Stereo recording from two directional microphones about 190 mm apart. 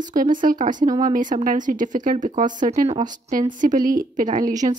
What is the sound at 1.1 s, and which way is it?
Speech, 45° right (ahead or behind).